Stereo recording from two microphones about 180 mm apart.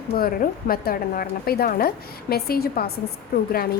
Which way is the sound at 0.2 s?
55° left (ahead or behind).